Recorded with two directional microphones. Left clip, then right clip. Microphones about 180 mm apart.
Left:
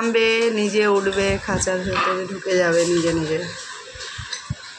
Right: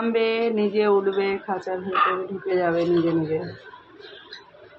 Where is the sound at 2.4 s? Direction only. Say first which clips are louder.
Left 4 dB; 15° left (ahead or behind).